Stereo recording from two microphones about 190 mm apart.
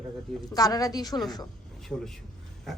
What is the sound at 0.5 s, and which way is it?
Speech, 20° left (ahead or behind).